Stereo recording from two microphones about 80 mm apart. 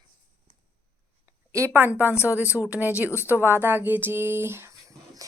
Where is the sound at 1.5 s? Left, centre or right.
Right.